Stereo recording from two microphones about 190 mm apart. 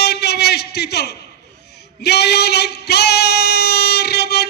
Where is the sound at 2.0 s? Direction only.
60° left (ahead or behind).